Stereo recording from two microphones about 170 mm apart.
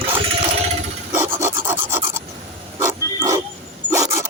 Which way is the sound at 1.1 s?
15° right (ahead or behind).